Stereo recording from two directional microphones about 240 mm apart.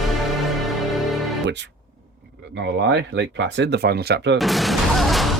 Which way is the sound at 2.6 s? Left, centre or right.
Right.